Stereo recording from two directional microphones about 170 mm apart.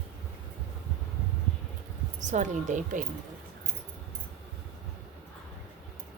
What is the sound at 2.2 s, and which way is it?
Speech, 45° right (ahead or behind).